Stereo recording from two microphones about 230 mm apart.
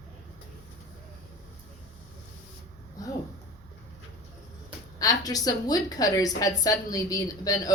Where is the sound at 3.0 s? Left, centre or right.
Centre.